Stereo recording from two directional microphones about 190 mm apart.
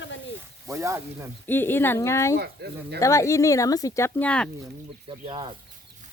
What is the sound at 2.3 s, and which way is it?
Speech, 60° right (ahead or behind).